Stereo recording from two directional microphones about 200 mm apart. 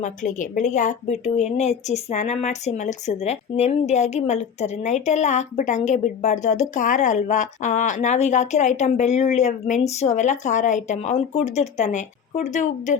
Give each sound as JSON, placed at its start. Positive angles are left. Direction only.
{"t": 0.0, "sound": "speech", "side_deg": 40}